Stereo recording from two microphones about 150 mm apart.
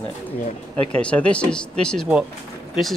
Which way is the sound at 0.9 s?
10° left (ahead or behind).